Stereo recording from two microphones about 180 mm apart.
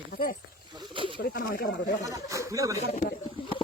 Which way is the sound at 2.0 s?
20° right (ahead or behind).